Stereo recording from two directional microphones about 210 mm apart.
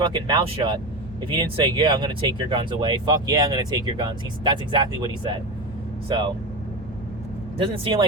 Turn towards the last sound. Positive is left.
turn(degrees=-25)  # may be behind; listen again after turning